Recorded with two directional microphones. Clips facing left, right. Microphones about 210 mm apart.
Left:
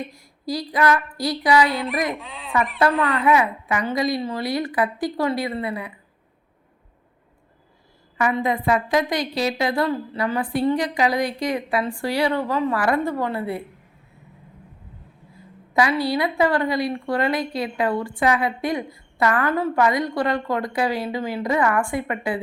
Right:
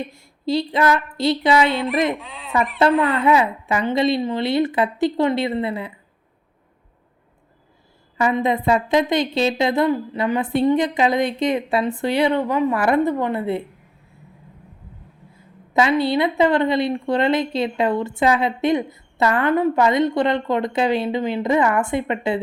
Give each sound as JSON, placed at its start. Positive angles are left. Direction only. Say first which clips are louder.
{"t": 0.0, "sound": "a woman's voice", "louder": "right 4 dB", "side_deg": -25}
{"t": 1.7, "sound": "speech", "louder": "right 4 dB", "side_deg": 0}
{"t": 2.8, "sound": "a woman's voice", "louder": "right 3 dB", "side_deg": -25}
{"t": 8.2, "sound": "a woman's voice", "louder": "right 3 dB", "side_deg": -25}
{"t": 15.7, "sound": "a woman's voice", "louder": "right 3 dB", "side_deg": -25}